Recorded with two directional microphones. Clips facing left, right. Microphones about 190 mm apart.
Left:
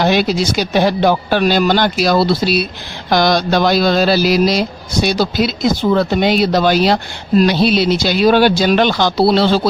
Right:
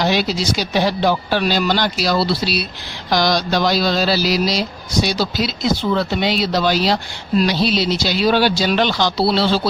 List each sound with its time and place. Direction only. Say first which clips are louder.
0.0 s speech: left 4 dB; 55° left (ahead or behind)